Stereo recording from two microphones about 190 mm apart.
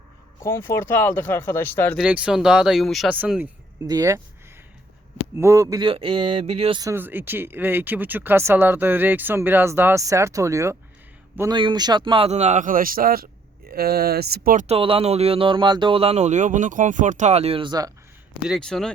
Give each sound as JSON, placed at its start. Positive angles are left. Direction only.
{"t": 0.4, "sound": "speech", "side_deg": 15}
{"t": 2.0, "sound": "speech", "side_deg": -5}
{"t": 3.8, "sound": "speech", "side_deg": -20}
{"t": 5.4, "sound": "speech", "side_deg": -15}
{"t": 6.7, "sound": "speech", "side_deg": -15}
{"t": 18.4, "sound": "speech", "side_deg": 0}